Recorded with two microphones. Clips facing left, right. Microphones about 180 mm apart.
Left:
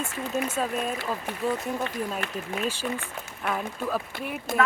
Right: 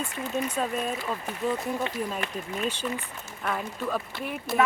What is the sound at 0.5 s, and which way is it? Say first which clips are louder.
Speech: left 1 dB; centre (ahead or behind).